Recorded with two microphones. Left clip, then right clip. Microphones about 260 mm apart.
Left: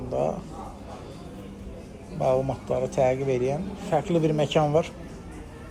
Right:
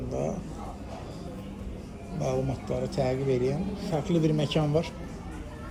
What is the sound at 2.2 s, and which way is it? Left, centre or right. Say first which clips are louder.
Speech: left 7 dB; left.